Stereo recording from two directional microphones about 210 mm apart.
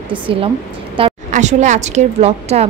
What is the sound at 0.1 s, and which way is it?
A woman's voice, 25° right (ahead or behind).